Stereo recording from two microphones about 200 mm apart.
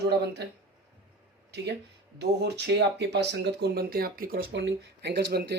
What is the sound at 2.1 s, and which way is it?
Speech, 55° right (ahead or behind).